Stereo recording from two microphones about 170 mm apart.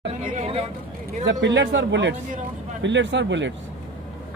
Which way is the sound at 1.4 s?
90° right.